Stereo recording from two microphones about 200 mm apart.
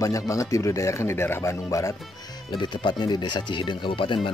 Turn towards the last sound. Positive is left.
turn(degrees=25)  # may be behind; listen again after turning